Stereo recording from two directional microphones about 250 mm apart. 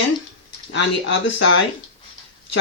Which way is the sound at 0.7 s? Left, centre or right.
Left.